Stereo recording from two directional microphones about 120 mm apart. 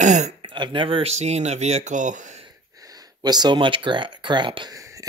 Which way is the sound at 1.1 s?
65° right (ahead or behind).